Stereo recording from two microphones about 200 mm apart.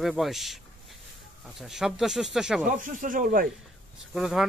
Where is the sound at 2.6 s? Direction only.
40° right (ahead or behind).